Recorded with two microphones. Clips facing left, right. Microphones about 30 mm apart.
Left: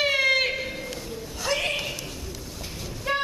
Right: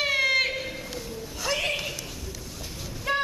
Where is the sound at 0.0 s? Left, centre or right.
Centre.